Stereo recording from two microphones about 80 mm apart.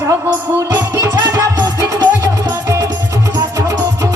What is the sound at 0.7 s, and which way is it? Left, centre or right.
Music, right.